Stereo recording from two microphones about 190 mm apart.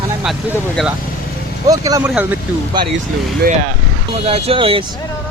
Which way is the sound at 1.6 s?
20° right (ahead or behind).